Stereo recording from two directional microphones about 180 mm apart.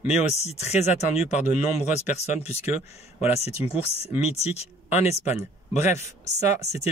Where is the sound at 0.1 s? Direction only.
35° left (ahead or behind).